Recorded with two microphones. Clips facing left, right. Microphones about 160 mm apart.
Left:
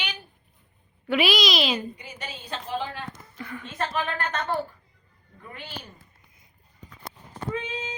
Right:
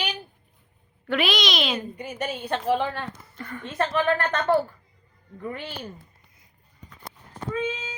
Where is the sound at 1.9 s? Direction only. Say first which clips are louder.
Right 9 dB; 50° right (ahead or behind).